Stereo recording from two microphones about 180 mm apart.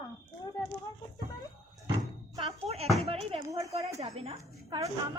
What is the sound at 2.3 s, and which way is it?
Speech, 35° right (ahead or behind).